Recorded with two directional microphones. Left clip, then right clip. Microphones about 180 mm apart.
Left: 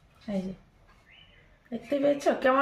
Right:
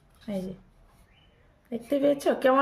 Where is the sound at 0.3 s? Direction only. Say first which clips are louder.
Even; 35° right (ahead or behind).